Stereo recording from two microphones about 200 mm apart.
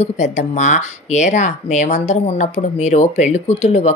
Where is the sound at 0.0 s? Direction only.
35° left (ahead or behind).